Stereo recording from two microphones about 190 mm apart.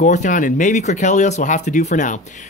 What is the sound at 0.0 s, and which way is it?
Speech, 40° left (ahead or behind).